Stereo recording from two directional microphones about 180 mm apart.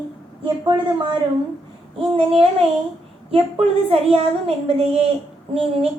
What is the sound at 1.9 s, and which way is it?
A woman's voice, 30° right (ahead or behind).